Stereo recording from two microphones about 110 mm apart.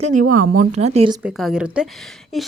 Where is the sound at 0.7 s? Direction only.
85° right.